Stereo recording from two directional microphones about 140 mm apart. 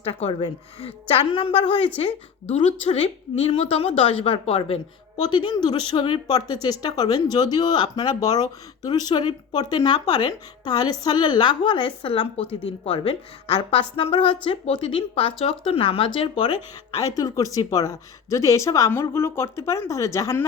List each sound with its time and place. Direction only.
0.0 s a woman's voice: 45° left (ahead or behind)
17.2 s a woman's voice: 25° left (ahead or behind)